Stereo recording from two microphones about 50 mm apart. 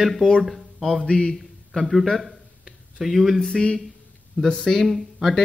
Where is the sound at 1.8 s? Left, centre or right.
Centre.